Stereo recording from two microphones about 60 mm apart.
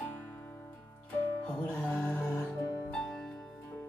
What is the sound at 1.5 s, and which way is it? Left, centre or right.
Music, left.